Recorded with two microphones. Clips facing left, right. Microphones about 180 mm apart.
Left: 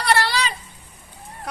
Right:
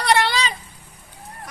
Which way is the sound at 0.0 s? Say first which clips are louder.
Right 2 dB; 20° right (ahead or behind).